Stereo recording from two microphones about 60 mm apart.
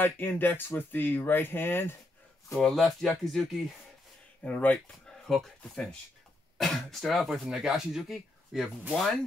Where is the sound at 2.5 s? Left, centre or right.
Centre.